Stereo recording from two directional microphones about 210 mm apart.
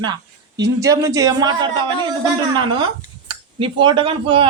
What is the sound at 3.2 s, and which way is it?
Speech, 25° right (ahead or behind).